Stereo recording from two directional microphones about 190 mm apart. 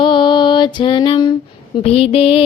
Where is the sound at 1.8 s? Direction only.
30° left (ahead or behind).